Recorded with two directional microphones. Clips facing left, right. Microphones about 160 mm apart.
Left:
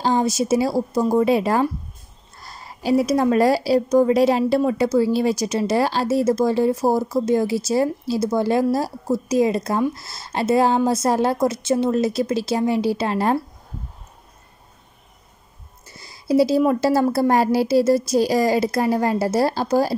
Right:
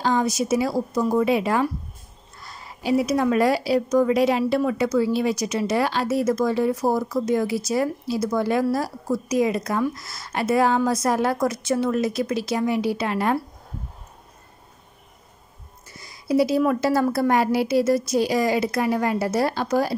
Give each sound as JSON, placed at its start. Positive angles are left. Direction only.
{"t": 0.0, "sound": "a woman's voice", "side_deg": 30}
{"t": 16.0, "sound": "a woman's voice", "side_deg": 30}